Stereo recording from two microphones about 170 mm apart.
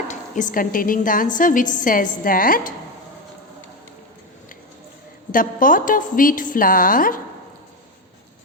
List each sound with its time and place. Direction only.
0.1 s a woman's voice: 50° left (ahead or behind)
5.3 s a woman's voice: 55° left (ahead or behind)